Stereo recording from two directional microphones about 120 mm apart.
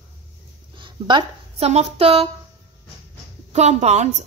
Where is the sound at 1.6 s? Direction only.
60° right (ahead or behind).